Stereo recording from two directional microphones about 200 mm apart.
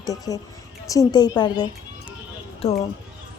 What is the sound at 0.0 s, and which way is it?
Speech, 15° left (ahead or behind).